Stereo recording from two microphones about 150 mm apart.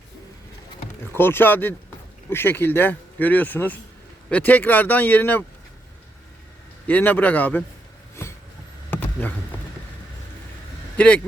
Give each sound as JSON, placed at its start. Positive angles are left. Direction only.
{"t": 1.1, "sound": "speech", "side_deg": 15}
{"t": 6.8, "sound": "speech", "side_deg": 10}
{"t": 8.1, "sound": "a sound", "side_deg": 20}
{"t": 10.9, "sound": "speech", "side_deg": 10}